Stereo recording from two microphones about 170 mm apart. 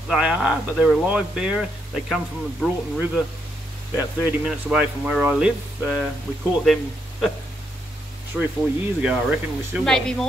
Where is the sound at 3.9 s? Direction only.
10° right (ahead or behind).